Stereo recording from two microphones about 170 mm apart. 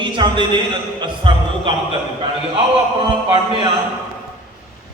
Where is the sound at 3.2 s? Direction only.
30° right (ahead or behind).